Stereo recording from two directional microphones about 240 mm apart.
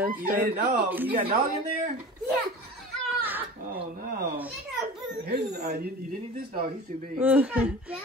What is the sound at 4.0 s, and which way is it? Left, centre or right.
Speech, right.